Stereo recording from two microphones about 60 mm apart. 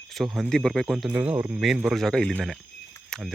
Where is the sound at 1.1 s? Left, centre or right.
Right.